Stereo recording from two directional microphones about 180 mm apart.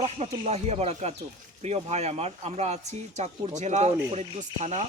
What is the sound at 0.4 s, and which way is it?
Speech, 35° right (ahead or behind).